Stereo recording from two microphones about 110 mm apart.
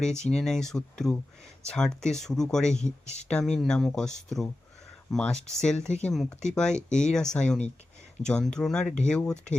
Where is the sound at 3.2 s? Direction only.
5° left (ahead or behind).